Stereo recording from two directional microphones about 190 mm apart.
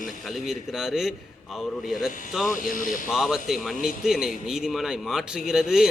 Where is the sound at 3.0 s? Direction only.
Centre (ahead or behind).